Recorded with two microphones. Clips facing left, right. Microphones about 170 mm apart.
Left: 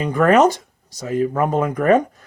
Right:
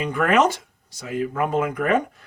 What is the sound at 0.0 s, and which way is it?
Speech, 40° left (ahead or behind).